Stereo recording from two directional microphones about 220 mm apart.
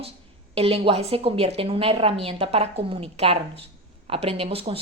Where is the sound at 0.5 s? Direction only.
25° right (ahead or behind).